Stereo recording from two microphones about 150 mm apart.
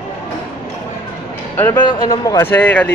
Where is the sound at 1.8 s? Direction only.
25° left (ahead or behind).